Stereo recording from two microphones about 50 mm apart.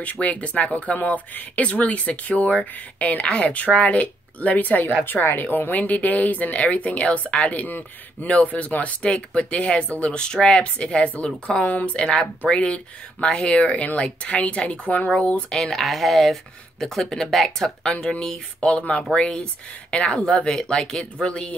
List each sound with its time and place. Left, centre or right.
0.0 s speech: left
5.0 s speech: left
15.5 s speech: centre